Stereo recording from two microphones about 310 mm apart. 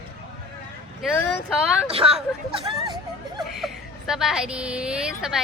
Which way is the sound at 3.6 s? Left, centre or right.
Centre.